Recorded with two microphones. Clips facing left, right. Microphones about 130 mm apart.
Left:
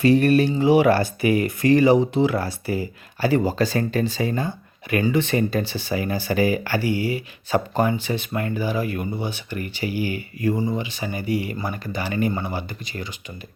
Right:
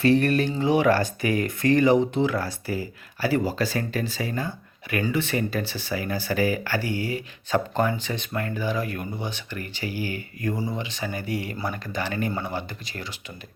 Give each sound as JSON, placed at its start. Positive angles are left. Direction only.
{"t": 0.2, "sound": "speech", "side_deg": 15}